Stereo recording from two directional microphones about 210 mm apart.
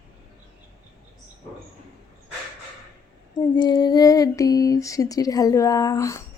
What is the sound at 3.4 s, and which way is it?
Female singing, 20° left (ahead or behind).